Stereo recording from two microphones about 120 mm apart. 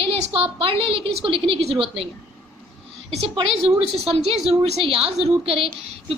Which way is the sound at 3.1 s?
55° right (ahead or behind).